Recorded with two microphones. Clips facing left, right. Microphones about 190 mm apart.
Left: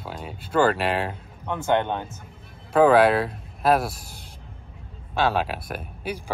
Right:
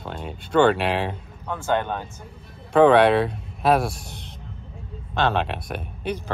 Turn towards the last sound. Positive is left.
turn(degrees=5)  # may be behind; listen again after turning